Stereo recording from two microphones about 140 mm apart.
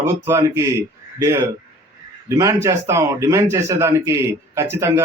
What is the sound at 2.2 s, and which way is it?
Speech, 20° right (ahead or behind).